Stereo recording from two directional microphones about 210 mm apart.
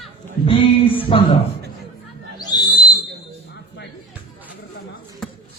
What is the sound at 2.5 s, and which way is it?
Owl, 20° left (ahead or behind).